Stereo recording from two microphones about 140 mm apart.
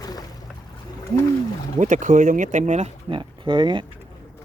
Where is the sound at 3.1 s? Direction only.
35° right (ahead or behind).